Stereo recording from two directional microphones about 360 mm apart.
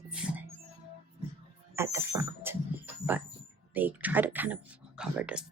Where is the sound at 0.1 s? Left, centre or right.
Centre.